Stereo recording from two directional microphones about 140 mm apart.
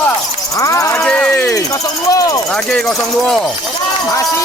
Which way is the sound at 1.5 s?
25° left (ahead or behind).